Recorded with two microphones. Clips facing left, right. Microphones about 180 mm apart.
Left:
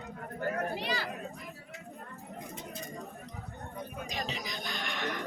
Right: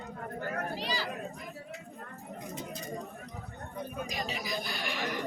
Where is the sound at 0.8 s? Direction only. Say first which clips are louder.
Even; 55° left (ahead or behind).